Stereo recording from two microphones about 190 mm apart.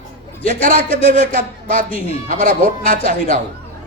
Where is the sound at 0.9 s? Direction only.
30° left (ahead or behind).